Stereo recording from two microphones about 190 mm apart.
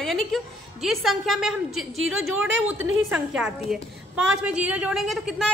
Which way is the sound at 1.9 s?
90° right.